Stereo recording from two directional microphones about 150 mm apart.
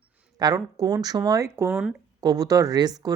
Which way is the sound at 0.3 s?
25° right (ahead or behind).